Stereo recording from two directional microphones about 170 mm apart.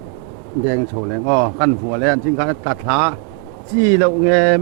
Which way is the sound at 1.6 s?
15° right (ahead or behind).